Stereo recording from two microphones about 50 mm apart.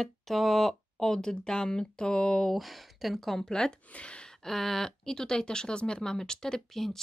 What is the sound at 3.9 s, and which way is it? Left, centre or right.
Speech, left.